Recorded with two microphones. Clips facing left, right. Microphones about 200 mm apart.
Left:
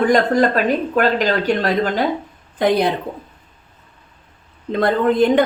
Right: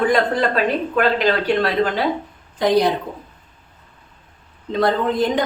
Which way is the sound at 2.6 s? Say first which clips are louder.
Even; 55° left (ahead or behind).